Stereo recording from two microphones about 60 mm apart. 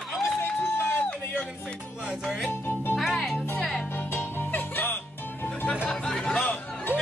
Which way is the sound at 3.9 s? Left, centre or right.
Left.